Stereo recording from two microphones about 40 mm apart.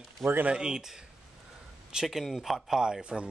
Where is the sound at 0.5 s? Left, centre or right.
Centre.